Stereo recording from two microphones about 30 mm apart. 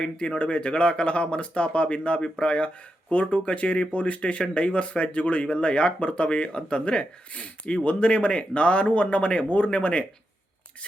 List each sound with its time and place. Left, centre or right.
0.0 s speech: left